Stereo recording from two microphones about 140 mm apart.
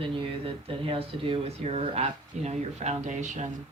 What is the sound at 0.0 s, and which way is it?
A woman's voice, 40° right (ahead or behind).